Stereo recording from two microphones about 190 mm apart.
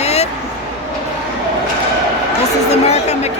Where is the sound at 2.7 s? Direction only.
35° left (ahead or behind).